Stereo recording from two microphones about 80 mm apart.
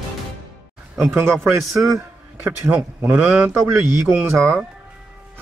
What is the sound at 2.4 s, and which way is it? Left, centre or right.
Speech, right.